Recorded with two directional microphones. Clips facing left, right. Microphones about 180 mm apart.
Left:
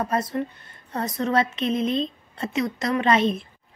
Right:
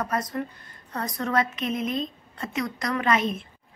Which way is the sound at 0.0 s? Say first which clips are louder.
Left 3 dB; 25° left (ahead or behind).